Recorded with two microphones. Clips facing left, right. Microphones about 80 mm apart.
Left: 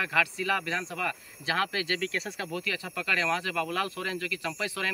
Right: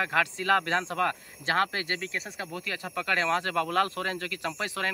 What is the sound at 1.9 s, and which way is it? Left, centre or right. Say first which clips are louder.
Speech: left 2 dB; right.